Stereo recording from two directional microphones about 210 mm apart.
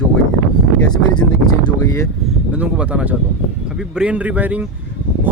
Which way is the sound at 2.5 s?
5° right (ahead or behind).